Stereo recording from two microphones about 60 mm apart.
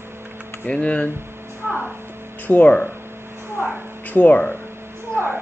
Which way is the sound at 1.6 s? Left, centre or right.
Right.